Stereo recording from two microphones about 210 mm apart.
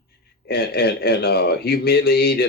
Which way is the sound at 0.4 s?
45° left (ahead or behind).